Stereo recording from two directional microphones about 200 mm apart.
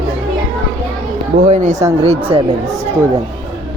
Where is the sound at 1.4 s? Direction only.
35° right (ahead or behind).